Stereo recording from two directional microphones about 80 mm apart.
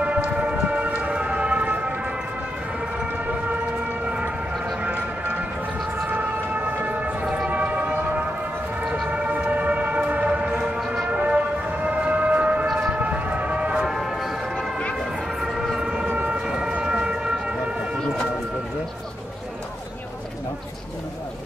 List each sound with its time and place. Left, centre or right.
0.0 s vehicle: centre
2.8 s emergency vehicle: centre
4.8 s music: centre
5.9 s siren: centre
9.1 s train: centre
12.6 s siren: centre
15.0 s train: centre